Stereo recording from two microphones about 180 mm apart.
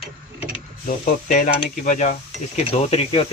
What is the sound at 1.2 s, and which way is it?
Speech, 45° left (ahead or behind).